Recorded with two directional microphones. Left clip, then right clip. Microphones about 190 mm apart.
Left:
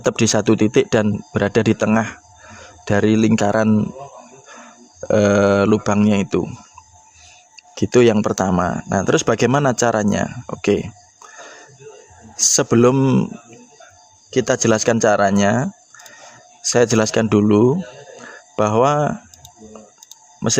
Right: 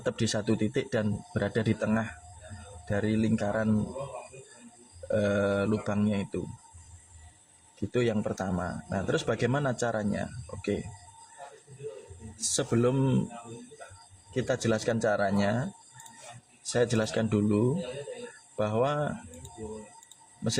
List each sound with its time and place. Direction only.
0.0 s speech: 50° left (ahead or behind)
5.1 s speech: 50° left (ahead or behind)
7.9 s speech: 50° left (ahead or behind)
12.5 s speech: 45° left (ahead or behind)
14.3 s speech: 50° left (ahead or behind)